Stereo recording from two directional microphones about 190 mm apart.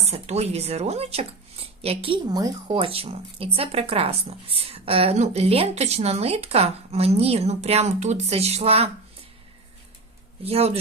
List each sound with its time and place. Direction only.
0.0 s speech: 35° right (ahead or behind)
10.4 s speech: 30° right (ahead or behind)